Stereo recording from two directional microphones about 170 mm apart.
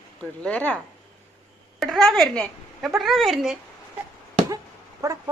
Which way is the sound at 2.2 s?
Centre (ahead or behind).